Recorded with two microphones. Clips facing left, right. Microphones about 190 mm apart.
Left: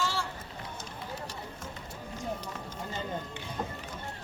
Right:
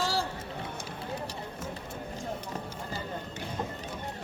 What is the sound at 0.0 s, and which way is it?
Run, 35° right (ahead or behind).